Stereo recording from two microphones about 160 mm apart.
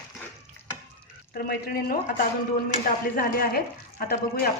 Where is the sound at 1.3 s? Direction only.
75° left (ahead or behind).